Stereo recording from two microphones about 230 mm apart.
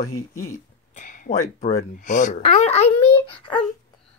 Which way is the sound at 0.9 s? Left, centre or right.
Left.